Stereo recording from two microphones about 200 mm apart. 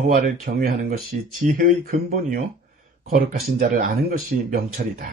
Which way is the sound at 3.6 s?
50° right (ahead or behind).